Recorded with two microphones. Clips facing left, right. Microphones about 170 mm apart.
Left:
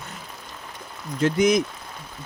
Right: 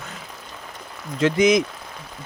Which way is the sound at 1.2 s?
90° right.